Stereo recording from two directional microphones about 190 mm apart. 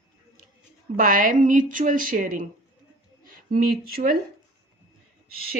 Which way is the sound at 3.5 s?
45° right (ahead or behind).